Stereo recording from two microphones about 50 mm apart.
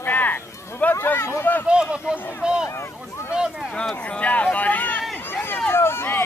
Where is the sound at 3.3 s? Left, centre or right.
Centre.